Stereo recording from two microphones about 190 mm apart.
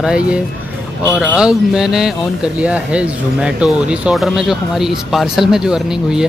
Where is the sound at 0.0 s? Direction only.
5° right (ahead or behind).